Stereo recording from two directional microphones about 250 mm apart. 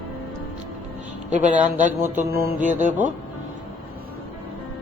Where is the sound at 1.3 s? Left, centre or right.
Right.